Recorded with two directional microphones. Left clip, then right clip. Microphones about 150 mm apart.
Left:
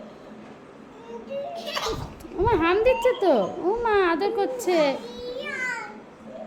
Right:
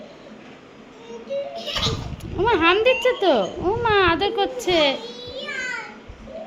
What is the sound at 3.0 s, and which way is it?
Speech, 5° left (ahead or behind).